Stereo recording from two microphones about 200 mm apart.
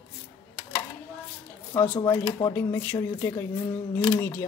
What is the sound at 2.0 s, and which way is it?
Speech, 20° left (ahead or behind).